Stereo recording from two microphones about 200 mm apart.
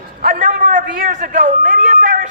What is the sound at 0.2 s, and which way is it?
A man's voice, 40° right (ahead or behind).